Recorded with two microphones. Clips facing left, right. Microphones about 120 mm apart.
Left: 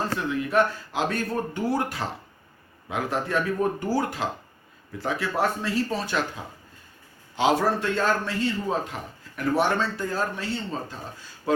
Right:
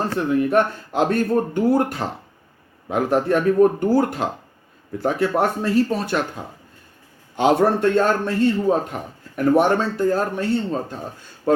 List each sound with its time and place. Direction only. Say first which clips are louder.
0.3 s a man's voice: right 5 dB; 45° right (ahead or behind)